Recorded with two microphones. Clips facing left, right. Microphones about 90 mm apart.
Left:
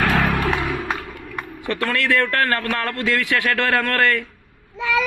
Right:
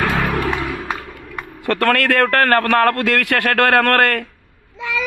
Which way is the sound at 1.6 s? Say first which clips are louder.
Right 6 dB; 60° right (ahead or behind).